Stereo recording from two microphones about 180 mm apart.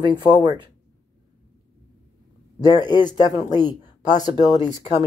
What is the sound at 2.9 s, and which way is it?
Speech, 25° left (ahead or behind).